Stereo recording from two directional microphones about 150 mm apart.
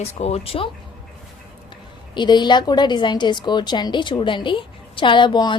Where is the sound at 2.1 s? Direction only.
30° left (ahead or behind).